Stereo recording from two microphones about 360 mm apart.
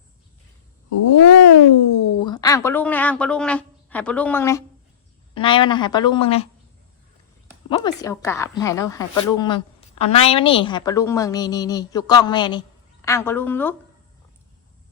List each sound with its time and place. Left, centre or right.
0.9 s cat: left
2.2 s a woman's voice: centre
7.7 s a woman's voice: centre